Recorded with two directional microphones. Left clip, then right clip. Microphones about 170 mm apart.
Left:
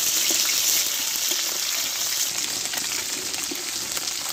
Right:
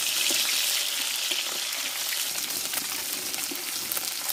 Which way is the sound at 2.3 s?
10° right (ahead or behind).